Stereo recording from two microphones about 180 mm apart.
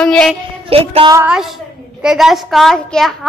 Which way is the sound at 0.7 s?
35° right (ahead or behind).